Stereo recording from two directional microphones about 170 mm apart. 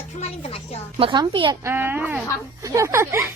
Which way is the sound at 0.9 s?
25° right (ahead or behind).